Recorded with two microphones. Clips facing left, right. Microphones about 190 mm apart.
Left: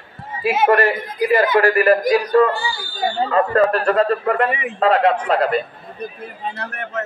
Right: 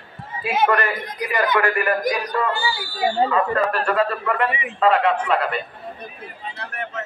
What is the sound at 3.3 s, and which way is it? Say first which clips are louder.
A man's voice: left 5 dB; 40° left (ahead or behind).